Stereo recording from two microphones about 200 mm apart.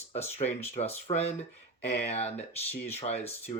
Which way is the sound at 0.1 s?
35° left (ahead or behind).